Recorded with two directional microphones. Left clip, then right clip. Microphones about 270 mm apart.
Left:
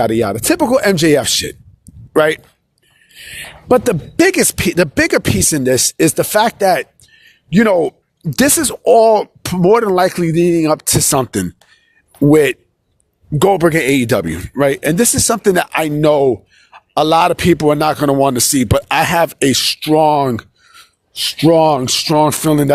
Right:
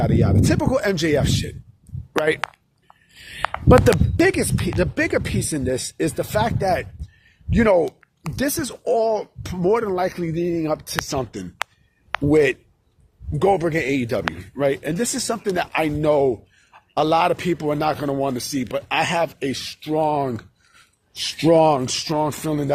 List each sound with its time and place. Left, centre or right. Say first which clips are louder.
0.0 s speech: left 7 dB; left
3.1 s speech: right 3 dB; left